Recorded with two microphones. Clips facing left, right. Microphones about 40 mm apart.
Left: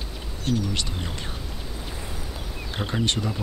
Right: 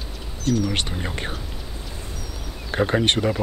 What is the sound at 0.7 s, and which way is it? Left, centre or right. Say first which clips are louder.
Speech: right 4 dB; right.